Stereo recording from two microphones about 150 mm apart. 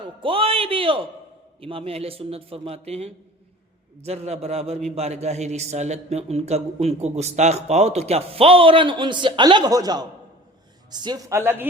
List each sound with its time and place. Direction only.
0.2 s a man's voice: 35° right (ahead or behind); by 11.6 s 15° right (ahead or behind)